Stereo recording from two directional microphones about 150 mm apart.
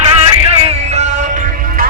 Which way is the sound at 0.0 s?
45° right (ahead or behind).